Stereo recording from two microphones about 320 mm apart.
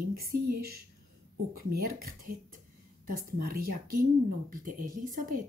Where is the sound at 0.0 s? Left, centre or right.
Right.